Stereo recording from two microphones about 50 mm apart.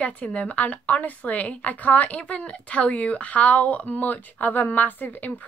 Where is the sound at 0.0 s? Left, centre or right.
Left.